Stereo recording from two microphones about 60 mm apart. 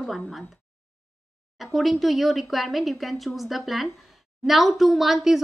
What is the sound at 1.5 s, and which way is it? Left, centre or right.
A woman's voice, centre.